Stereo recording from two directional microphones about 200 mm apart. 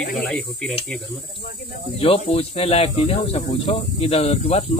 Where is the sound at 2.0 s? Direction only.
30° left (ahead or behind).